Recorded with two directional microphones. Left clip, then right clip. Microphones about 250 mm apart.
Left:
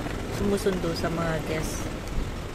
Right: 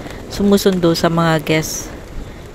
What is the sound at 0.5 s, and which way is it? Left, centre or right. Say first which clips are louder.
Speech: right 13 dB; right.